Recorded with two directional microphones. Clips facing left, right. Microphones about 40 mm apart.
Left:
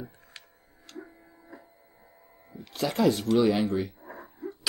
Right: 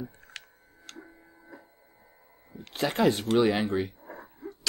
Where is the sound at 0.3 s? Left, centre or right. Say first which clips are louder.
Right 5 dB; right.